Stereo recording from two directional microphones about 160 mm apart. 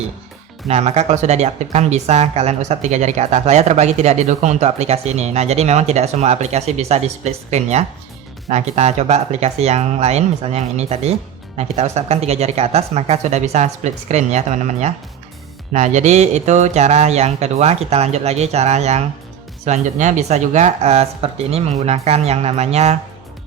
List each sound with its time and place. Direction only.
0.7 s speech: 40° right (ahead or behind)